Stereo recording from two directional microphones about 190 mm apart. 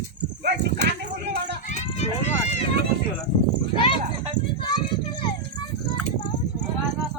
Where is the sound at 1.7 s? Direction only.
35° left (ahead or behind).